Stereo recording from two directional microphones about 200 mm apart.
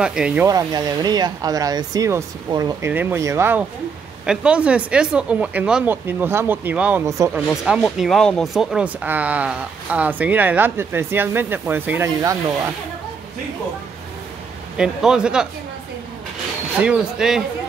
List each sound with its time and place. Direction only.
0.0 s a man's voice: 5° right (ahead or behind)
0.5 s speech: 20° right (ahead or behind)
7.4 s speech: 5° right (ahead or behind)
14.8 s a man's voice: 5° right (ahead or behind)
16.8 s a man's voice: 5° right (ahead or behind)